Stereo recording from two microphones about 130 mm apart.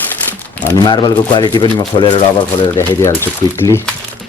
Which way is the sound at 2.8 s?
20° left (ahead or behind).